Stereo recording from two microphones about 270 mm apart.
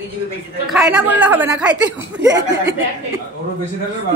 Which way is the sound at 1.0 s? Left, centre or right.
Centre.